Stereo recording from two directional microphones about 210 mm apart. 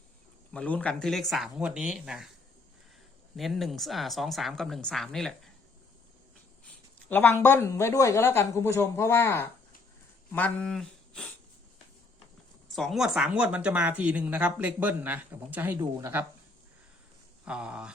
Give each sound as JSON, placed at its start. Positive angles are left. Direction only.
{"t": 0.5, "sound": "speech", "side_deg": 5}
{"t": 3.3, "sound": "speech", "side_deg": 0}
{"t": 7.1, "sound": "a woman's voice", "side_deg": 10}
{"t": 12.7, "sound": "speech", "side_deg": 0}
{"t": 17.4, "sound": "speech", "side_deg": -5}